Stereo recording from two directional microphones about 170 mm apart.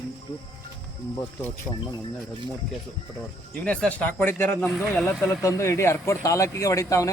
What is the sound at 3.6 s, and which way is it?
Speech, 5° left (ahead or behind).